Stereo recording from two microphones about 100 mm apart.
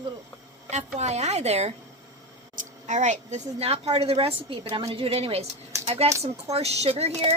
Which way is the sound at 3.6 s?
90° right.